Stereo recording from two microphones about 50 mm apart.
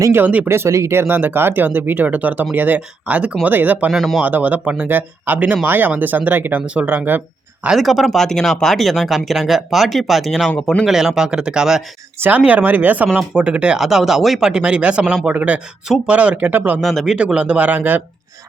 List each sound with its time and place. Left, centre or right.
0.2 s speech: right
0.4 s speech: right
0.9 s speech: right
1.6 s speech: right
3.9 s speech: centre
4.2 s speech: right
7.7 s speech: centre
12.5 s speech: right
13.1 s speech: right
13.7 s speech: centre
14.5 s speech: right
16.8 s speech: centre
17.3 s speech: right